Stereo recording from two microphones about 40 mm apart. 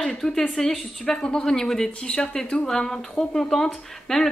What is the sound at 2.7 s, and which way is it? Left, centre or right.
Speech, centre.